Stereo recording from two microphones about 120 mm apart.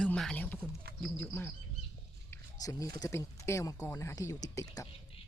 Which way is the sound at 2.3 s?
30° left (ahead or behind).